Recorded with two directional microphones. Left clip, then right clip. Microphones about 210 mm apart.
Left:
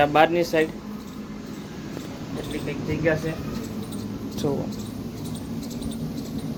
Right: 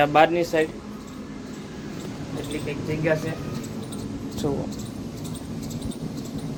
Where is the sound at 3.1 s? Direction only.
5° right (ahead or behind).